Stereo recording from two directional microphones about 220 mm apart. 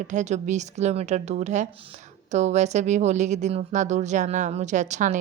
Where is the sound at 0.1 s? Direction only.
35° right (ahead or behind).